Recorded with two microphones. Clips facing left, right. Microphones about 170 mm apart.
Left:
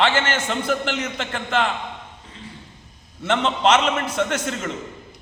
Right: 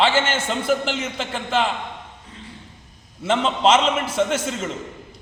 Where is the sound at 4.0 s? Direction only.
5° right (ahead or behind).